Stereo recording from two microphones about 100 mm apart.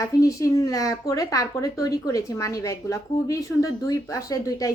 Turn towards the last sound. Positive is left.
turn(degrees=35)  # may be behind; listen again after turning